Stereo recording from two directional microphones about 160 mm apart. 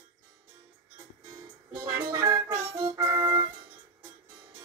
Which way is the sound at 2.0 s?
20° right (ahead or behind).